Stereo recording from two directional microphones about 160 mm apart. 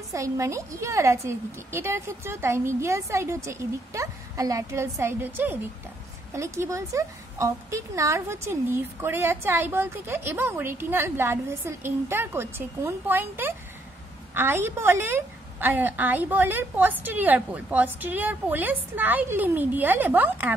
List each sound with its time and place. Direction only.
0.1 s a woman's voice: 20° right (ahead or behind)